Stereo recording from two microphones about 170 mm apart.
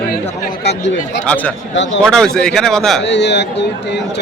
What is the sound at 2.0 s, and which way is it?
Speech, 5° left (ahead or behind).